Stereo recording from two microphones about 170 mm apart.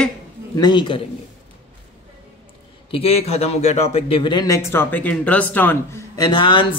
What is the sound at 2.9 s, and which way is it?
Speech, 35° left (ahead or behind).